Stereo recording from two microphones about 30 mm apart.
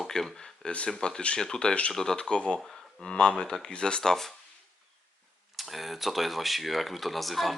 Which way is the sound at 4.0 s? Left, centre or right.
Centre.